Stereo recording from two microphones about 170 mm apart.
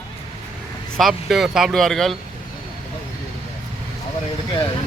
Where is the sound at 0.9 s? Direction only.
Centre (ahead or behind).